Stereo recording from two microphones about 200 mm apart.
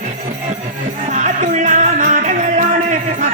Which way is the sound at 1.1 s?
40° right (ahead or behind).